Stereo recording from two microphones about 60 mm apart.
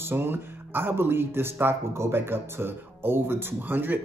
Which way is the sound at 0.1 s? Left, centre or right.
Right.